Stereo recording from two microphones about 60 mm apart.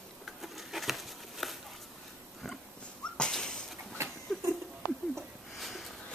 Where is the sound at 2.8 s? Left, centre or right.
Centre.